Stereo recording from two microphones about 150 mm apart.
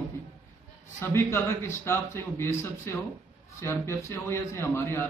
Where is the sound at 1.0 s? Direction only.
20° left (ahead or behind).